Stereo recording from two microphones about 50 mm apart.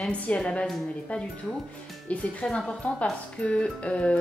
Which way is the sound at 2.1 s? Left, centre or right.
Left.